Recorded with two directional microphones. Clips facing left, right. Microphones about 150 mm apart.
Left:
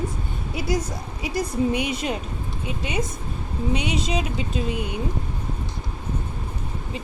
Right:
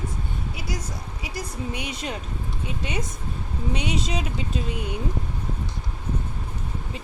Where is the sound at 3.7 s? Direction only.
5° left (ahead or behind).